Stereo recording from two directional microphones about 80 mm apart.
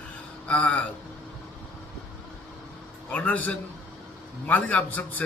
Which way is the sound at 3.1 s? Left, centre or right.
Centre.